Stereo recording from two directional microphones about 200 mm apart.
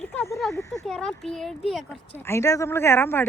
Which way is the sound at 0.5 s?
15° left (ahead or behind).